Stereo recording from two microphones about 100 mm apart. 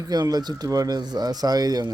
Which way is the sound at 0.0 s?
40° right (ahead or behind).